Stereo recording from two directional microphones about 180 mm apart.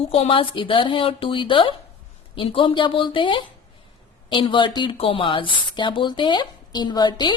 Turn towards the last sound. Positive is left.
turn(degrees=25)  # may be behind; listen again after turning